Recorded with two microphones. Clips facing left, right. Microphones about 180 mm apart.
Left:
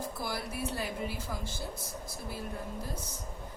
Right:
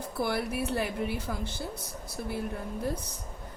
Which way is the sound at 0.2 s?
60° right (ahead or behind).